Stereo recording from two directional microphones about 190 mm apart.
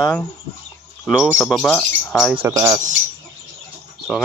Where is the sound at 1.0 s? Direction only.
Centre (ahead or behind).